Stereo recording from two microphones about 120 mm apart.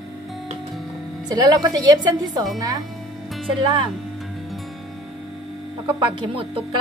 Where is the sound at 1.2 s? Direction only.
35° right (ahead or behind).